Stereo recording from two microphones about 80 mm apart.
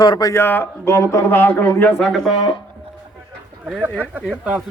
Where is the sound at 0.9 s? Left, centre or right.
Left.